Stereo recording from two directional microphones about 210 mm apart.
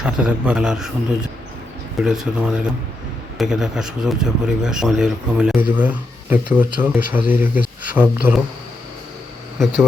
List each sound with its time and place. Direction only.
0.0 s a man's voice: 5° right (ahead or behind)